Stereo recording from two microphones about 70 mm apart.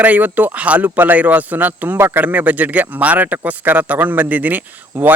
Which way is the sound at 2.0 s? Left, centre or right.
Right.